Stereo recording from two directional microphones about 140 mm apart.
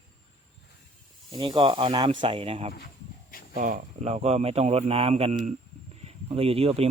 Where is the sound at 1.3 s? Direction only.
35° right (ahead or behind).